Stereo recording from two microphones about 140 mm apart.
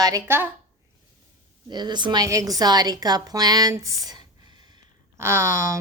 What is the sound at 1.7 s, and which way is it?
A woman's voice, 30° right (ahead or behind).